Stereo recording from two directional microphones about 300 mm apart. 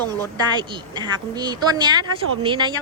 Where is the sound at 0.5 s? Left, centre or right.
Centre.